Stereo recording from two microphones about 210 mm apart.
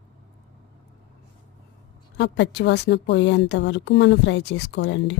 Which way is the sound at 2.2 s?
55° left (ahead or behind).